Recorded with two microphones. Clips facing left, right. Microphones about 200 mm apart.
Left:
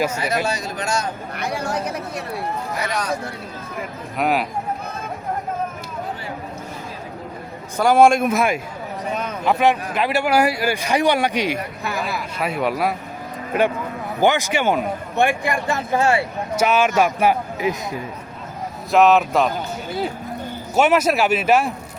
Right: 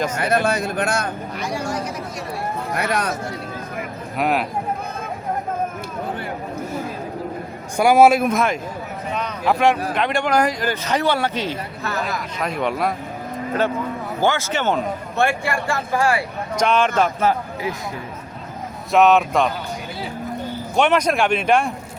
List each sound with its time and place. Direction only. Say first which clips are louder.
0.2 s speech: right 3 dB; 55° right (ahead or behind)
1.4 s speech: left 1 dB; 60° left (ahead or behind)
2.7 s speech: right 5 dB; 60° right (ahead or behind)
4.2 s speech: even; centre (ahead or behind)
7.8 s speech: right 1 dB; 10° right (ahead or behind)
8.3 s speech: even; 5° left (ahead or behind)
14.2 s speech: left 3 dB; 15° left (ahead or behind)
16.6 s speech: left 1 dB; 5° left (ahead or behind)
18.9 s speech: even; centre (ahead or behind)
20.7 s speech: left 1 dB; 5° left (ahead or behind)